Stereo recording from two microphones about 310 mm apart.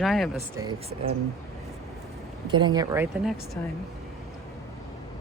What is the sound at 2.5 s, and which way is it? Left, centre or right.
Speech, centre.